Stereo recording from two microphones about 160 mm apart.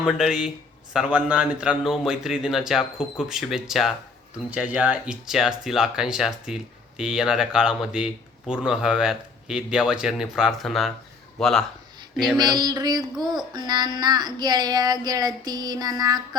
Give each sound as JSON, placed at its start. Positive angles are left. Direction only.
{"t": 0.0, "sound": "speech", "side_deg": -5}
{"t": 12.1, "sound": "a sound", "side_deg": -5}
{"t": 12.4, "sound": "child singing", "side_deg": -25}